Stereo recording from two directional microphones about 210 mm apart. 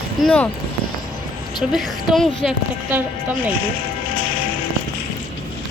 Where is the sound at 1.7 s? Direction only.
Centre (ahead or behind).